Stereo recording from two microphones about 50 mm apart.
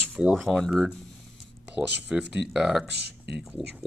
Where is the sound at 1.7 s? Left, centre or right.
Right.